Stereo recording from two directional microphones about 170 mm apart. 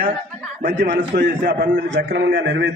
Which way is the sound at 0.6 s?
80° right.